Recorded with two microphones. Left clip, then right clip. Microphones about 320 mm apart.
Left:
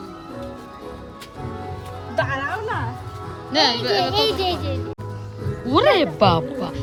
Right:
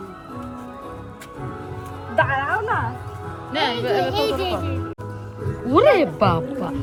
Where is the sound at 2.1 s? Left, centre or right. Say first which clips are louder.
Right 4 dB; centre.